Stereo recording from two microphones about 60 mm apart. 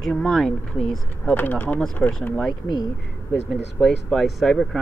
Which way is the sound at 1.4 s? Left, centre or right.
Left.